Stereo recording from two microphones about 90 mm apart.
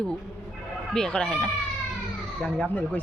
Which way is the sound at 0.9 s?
5° left (ahead or behind).